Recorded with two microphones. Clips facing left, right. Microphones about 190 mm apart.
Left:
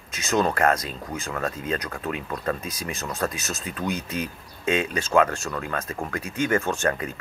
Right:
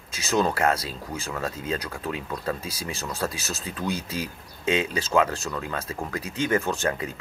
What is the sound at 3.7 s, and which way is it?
Speech, 75° left (ahead or behind).